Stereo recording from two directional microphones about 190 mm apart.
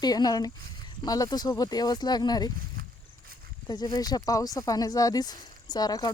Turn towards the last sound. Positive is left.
turn(degrees=20)  # may be behind; listen again after turning